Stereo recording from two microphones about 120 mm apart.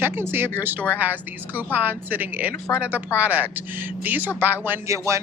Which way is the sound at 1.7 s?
15° right (ahead or behind).